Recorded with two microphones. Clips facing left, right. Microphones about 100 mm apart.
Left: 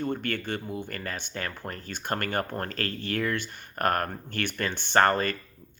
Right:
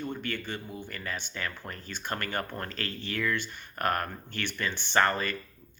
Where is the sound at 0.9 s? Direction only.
45° left (ahead or behind).